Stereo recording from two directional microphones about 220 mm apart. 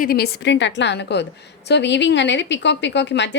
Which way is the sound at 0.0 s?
45° left (ahead or behind).